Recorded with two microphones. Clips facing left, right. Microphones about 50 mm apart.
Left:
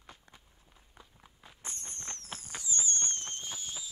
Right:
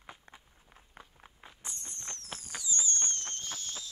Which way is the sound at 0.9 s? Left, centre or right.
Right.